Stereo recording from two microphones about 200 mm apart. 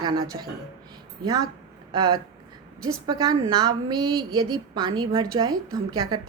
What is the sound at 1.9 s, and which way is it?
A woman's voice, 20° right (ahead or behind).